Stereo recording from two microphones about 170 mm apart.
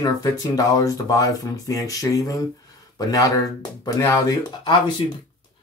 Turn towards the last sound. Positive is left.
turn(degrees=25)  # may be behind; listen again after turning